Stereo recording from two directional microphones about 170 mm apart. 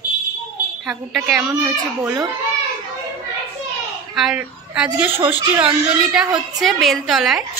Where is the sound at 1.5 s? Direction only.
15° right (ahead or behind).